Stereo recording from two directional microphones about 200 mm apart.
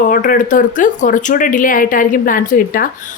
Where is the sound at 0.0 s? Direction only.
40° left (ahead or behind).